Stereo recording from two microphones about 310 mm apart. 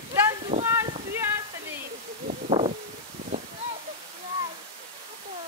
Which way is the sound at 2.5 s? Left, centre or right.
Centre.